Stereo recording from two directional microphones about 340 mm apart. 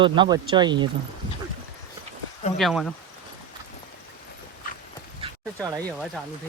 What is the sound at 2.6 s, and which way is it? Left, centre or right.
Speech, centre.